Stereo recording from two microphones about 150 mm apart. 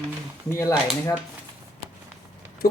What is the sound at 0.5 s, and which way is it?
Speech, 20° left (ahead or behind).